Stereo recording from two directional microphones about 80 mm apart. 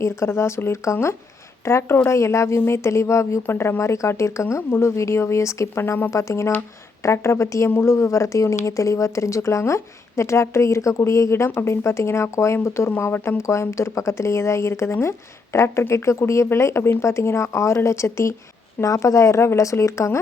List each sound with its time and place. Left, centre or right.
0.0 s speech: left